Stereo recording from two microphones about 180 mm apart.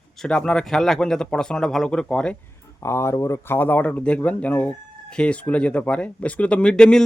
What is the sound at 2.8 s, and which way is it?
Speech, 15° left (ahead or behind).